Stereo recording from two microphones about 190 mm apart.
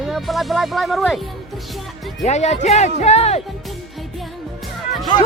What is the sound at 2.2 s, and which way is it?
Speech, 35° left (ahead or behind).